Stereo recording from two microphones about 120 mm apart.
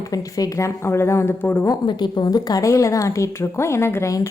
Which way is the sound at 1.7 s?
40° left (ahead or behind).